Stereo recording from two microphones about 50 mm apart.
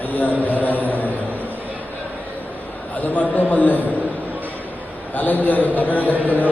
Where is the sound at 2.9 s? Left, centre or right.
Left.